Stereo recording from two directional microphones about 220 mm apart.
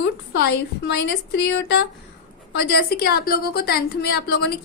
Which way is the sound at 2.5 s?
45° left (ahead or behind).